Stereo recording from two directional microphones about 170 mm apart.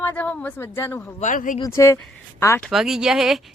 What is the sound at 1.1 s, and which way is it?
Speech, 50° left (ahead or behind).